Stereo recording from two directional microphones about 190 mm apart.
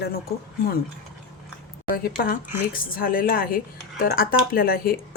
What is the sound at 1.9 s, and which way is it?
Speech, 50° left (ahead or behind).